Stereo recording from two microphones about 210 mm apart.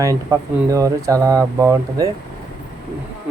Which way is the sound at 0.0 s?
15° right (ahead or behind).